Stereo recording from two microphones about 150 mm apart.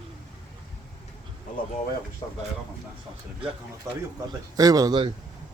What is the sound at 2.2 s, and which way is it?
Speech, 25° left (ahead or behind).